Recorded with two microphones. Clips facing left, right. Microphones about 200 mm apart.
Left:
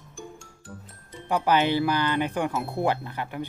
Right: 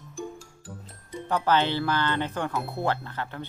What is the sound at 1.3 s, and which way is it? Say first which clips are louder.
Speech: left 2 dB; 10° left (ahead or behind).